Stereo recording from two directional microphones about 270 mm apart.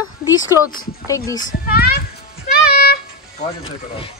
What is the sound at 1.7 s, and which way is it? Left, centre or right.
Speech, left.